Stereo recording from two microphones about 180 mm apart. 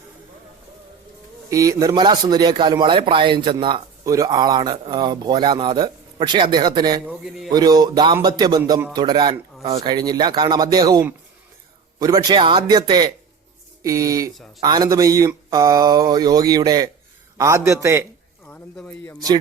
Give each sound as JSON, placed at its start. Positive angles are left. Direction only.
{"t": 1.5, "sound": "a man's voice", "side_deg": -20}
{"t": 7.0, "sound": "a man's voice", "side_deg": -5}
{"t": 7.5, "sound": "a man's voice", "side_deg": -20}
{"t": 18.4, "sound": "speech", "side_deg": 10}